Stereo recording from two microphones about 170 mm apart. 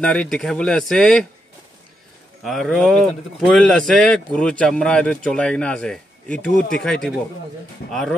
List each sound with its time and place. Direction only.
0.0 s a man's voice: 5° left (ahead or behind)
2.4 s a man's voice: centre (ahead or behind)
7.8 s speech: 60° left (ahead or behind)